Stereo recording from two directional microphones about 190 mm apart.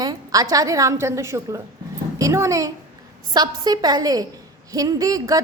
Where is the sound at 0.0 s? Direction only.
20° right (ahead or behind).